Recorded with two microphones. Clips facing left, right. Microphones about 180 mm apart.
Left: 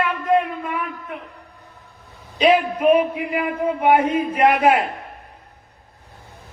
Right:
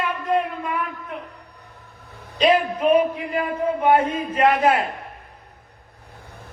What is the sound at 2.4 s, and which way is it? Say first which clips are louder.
Speech: left 2 dB; 10° left (ahead or behind).